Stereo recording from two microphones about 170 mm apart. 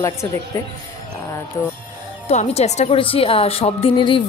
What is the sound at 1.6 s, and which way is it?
Speech, 20° left (ahead or behind).